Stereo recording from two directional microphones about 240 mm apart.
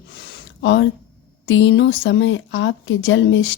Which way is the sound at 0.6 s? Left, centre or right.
Left.